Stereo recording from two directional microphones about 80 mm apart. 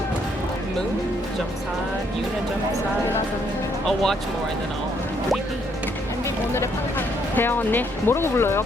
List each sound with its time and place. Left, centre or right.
3.8 s speech: centre
7.3 s speech: left